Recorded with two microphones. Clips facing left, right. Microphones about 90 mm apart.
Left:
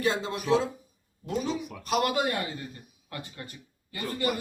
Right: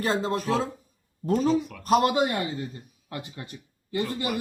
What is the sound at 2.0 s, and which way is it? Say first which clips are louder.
Speech: right 4 dB; 25° right (ahead or behind).